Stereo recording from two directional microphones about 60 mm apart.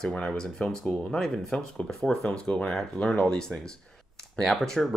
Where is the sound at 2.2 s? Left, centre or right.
Centre.